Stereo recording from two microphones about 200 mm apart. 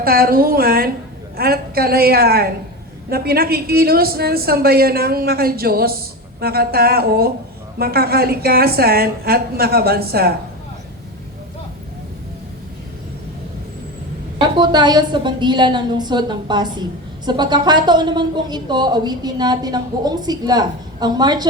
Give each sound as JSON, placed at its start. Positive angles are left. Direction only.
{"t": 0.0, "sound": "a woman's voice", "side_deg": -50}
{"t": 14.3, "sound": "speech", "side_deg": -20}